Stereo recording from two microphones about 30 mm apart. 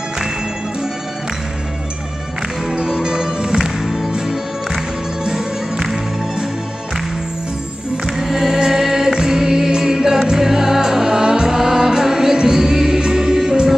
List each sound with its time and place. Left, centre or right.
2.7 s music: right
3.8 s music: centre
8.2 s music: centre
9.7 s choir: centre
10.3 s music: centre